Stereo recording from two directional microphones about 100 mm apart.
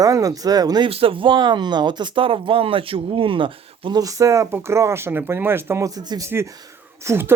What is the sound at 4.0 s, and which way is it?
Speech, 35° right (ahead or behind).